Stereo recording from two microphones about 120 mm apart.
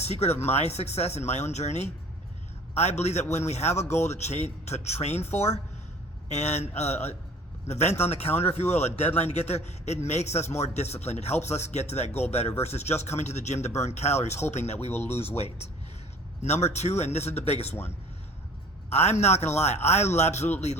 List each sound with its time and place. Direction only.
0.0 s a man's voice: 65° left (ahead or behind)
3.8 s speech: 20° left (ahead or behind)
4.1 s a man's voice: 65° left (ahead or behind)
6.3 s a man's voice: 65° left (ahead or behind)
8.0 s a man's voice: 55° left (ahead or behind)
16.4 s a man's voice: 65° left (ahead or behind)
18.9 s a man's voice: 60° left (ahead or behind)